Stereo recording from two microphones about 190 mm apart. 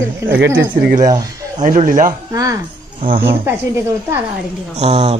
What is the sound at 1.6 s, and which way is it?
Speech, 40° right (ahead or behind).